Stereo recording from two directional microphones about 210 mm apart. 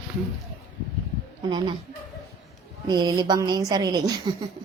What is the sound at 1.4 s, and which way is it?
Speech, 20° right (ahead or behind).